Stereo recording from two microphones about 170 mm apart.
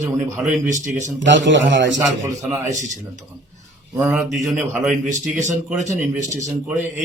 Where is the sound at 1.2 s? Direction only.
90° right.